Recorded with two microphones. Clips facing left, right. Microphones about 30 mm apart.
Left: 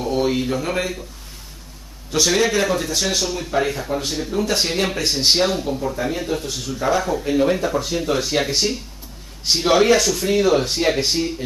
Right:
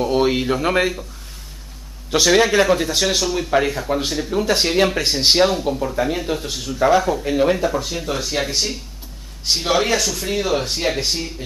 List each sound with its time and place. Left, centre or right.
0.1 s speech: right
2.0 s speech: centre